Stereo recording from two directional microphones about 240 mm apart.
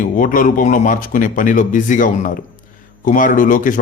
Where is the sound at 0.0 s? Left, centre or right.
Left.